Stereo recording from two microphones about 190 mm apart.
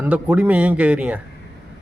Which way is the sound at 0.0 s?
10° right (ahead or behind).